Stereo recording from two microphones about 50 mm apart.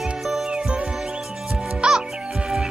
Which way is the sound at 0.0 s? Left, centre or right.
Centre.